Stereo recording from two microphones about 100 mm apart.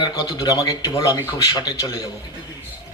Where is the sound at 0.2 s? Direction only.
35° left (ahead or behind).